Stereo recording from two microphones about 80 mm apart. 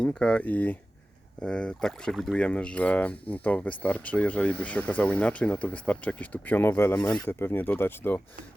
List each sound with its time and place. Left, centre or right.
0.0 s speech: centre; by 6.9 s left
6.9 s speech: centre
7.3 s speech: left